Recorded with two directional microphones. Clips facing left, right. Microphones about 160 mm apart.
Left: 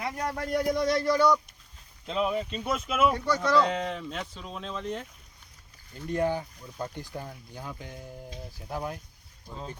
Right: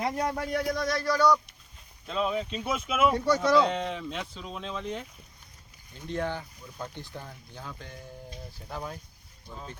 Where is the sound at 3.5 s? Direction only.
Centre (ahead or behind).